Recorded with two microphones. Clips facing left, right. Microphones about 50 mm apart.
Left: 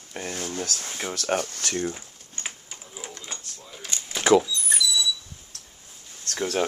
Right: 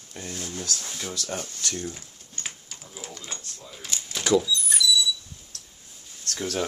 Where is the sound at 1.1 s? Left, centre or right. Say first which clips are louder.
Left 7 dB; left.